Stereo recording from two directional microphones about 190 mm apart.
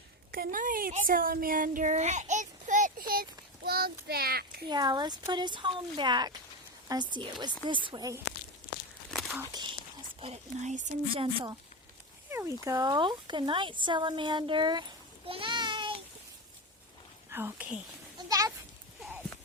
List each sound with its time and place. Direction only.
0.3 s speech: 50° right (ahead or behind)
4.7 s speech: 20° right (ahead or behind)
9.0 s a sound: centre (ahead or behind)
10.2 s speech: 35° right (ahead or behind)
12.3 s speech: 15° right (ahead or behind)
15.3 s a sound: 25° right (ahead or behind)
17.3 s speech: 10° right (ahead or behind)
18.3 s sheep: 20° right (ahead or behind)